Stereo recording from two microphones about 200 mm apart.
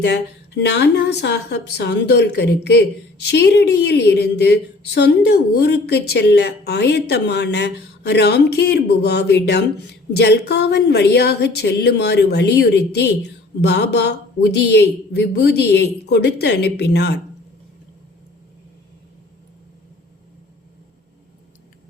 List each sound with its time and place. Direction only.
0.0 s a woman's voice: 60° left (ahead or behind)